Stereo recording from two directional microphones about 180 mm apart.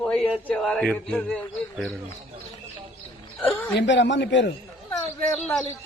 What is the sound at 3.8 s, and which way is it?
Speech, 80° left.